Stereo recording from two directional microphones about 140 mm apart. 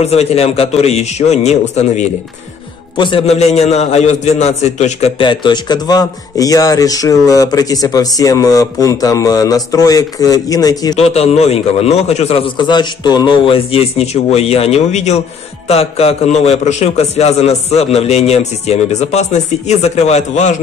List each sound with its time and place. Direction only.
0.0 s a man's voice: 45° left (ahead or behind)
3.0 s a man's voice: 40° left (ahead or behind)
5.2 s a man's voice: 35° left (ahead or behind)
11.0 s a man's voice: 50° left (ahead or behind)